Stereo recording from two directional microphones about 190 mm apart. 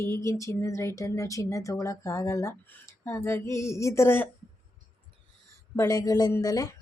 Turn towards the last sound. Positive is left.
turn(degrees=20)  # may be behind; listen again after turning